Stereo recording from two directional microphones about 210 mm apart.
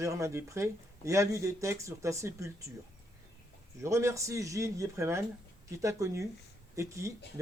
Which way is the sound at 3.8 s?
15° right (ahead or behind).